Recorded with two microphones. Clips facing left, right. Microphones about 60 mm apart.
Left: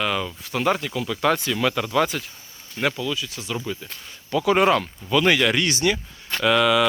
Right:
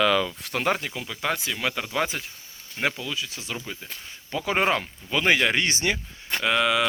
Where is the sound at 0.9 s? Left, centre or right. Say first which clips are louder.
Left 7 dB; centre.